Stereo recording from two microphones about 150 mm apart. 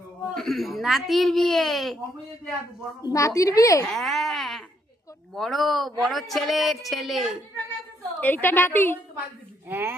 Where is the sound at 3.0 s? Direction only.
20° left (ahead or behind).